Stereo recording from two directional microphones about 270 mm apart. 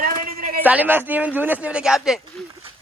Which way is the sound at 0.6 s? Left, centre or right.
Centre.